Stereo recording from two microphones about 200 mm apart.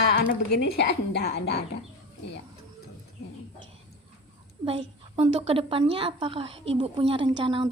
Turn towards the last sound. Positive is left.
turn(degrees=-25)  # may be behind; listen again after turning